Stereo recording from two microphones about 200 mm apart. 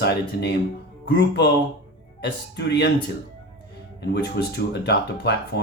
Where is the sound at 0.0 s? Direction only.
55° left (ahead or behind).